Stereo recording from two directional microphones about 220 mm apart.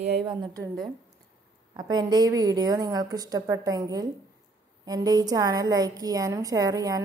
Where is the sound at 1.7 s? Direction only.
20° right (ahead or behind).